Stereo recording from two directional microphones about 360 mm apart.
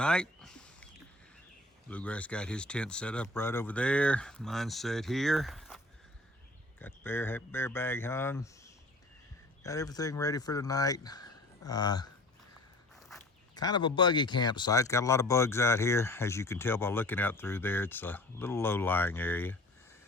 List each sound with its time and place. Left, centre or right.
0.0 s a sound: centre
1.9 s speech: centre
13.0 s dog: centre
13.6 s speech: centre